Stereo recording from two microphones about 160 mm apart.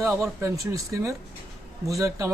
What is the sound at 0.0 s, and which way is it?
A man's voice, 20° right (ahead or behind).